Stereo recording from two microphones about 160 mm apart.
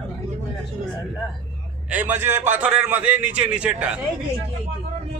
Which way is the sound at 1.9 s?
10° right (ahead or behind).